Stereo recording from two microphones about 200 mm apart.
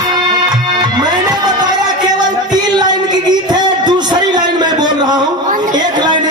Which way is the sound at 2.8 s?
20° right (ahead or behind).